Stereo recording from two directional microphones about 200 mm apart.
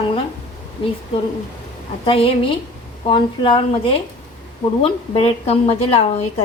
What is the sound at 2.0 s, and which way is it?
Speech, 30° left (ahead or behind).